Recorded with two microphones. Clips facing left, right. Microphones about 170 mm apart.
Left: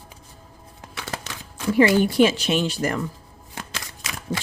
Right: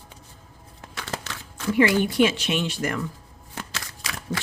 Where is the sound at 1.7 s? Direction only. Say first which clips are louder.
Left 3 dB; 35° left (ahead or behind).